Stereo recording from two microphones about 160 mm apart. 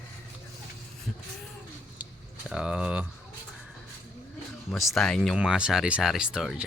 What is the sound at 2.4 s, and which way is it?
Speech, 5° right (ahead or behind).